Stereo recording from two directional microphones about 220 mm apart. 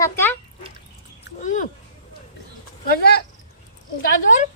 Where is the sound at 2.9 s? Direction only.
45° left (ahead or behind).